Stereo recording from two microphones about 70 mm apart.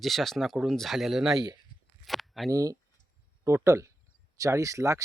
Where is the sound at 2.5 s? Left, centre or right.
Right.